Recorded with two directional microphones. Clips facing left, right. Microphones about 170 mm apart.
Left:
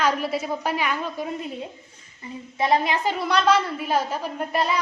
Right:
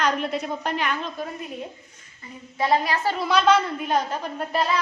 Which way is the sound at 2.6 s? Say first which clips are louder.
Left 1 dB; 20° left (ahead or behind).